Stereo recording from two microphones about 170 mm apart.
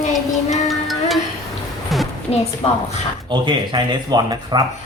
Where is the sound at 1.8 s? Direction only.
Centre (ahead or behind).